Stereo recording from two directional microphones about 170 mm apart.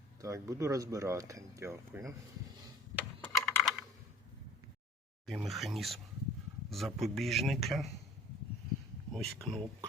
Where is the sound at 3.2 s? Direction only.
Centre (ahead or behind).